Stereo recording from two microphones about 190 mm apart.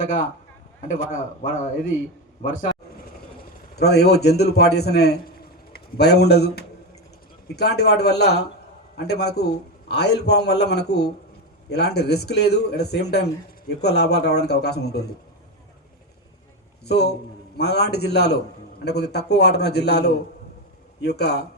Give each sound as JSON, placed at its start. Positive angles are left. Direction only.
{"t": 0.9, "sound": "a man's voice", "side_deg": 45}
{"t": 3.8, "sound": "a man's voice", "side_deg": 60}
{"t": 16.8, "sound": "a man's voice", "side_deg": 60}